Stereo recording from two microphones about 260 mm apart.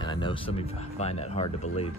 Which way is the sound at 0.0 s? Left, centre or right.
Centre.